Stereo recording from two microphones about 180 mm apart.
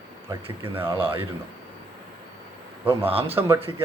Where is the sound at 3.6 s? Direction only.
30° right (ahead or behind).